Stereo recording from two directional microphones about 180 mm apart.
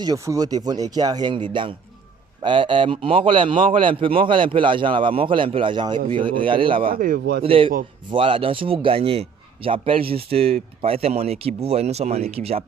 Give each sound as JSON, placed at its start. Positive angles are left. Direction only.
{"t": 0.0, "sound": "a man's voice", "side_deg": -20}
{"t": 6.8, "sound": "speech", "side_deg": -50}
{"t": 7.4, "sound": "a man's voice", "side_deg": -30}